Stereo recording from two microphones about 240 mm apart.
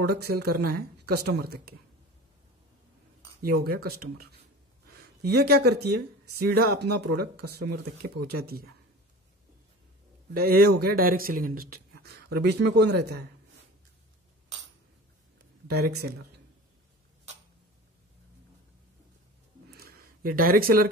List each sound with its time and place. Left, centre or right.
0.0 s speech: right
3.4 s speech: right
10.3 s speech: right
15.6 s a sound: right
16.0 s speech: right
19.7 s a sound: right